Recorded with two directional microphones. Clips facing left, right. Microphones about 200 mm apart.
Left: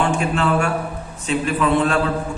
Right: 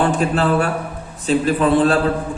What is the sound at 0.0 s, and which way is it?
Mantra, 35° right (ahead or behind).